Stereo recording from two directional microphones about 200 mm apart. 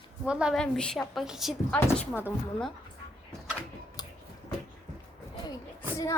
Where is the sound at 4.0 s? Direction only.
20° left (ahead or behind).